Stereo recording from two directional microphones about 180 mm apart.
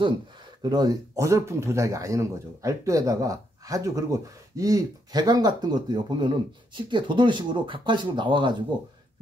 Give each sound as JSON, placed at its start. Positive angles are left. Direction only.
{"t": 0.6, "sound": "speech", "side_deg": -20}